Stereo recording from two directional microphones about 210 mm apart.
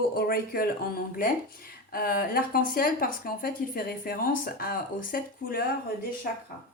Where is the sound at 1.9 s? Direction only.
45° left (ahead or behind).